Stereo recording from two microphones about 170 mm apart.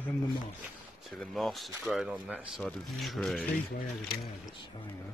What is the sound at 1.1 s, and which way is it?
Speech, centre (ahead or behind).